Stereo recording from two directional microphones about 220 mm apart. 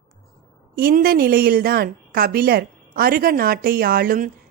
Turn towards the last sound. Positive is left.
turn(degrees=-40)  # may be behind; listen again after turning